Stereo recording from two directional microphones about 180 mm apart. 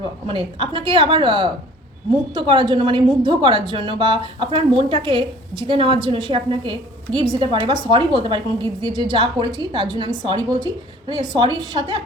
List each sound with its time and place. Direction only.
0.0 s a woman's voice: 30° right (ahead or behind)